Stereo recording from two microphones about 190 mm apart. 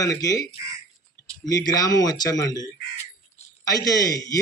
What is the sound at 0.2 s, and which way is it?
Speech, 20° left (ahead or behind).